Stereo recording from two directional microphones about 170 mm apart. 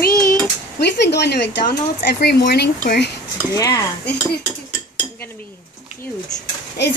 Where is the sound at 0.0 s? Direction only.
55° left (ahead or behind); by 1.5 s 80° left.